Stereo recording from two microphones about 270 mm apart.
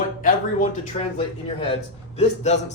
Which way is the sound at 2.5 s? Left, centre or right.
Left.